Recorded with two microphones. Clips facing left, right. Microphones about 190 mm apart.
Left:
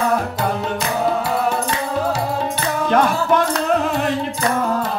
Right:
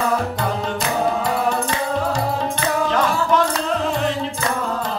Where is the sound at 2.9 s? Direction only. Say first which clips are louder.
Left 6 dB; 55° left (ahead or behind).